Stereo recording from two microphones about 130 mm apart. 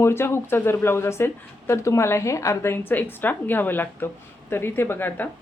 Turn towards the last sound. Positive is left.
turn(degrees=15)  # may be behind; listen again after turning